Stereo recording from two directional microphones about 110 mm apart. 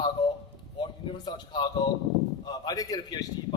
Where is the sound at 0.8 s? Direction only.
45° left (ahead or behind).